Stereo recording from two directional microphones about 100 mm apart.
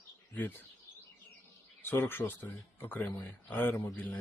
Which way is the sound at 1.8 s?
20° left (ahead or behind).